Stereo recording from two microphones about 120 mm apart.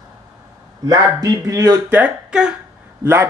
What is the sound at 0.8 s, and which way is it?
Speech, 30° right (ahead or behind).